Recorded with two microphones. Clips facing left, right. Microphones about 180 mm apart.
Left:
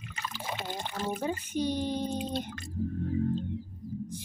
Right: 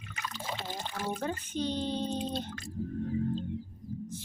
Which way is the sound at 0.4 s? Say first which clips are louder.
Left 2 dB; 15° left (ahead or behind).